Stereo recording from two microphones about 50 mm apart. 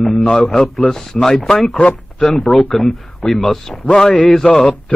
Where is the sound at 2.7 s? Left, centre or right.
Centre.